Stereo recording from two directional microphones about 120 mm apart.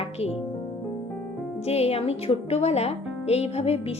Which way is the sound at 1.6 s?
60° left (ahead or behind).